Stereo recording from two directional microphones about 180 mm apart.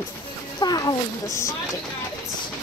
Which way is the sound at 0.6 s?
20° left (ahead or behind).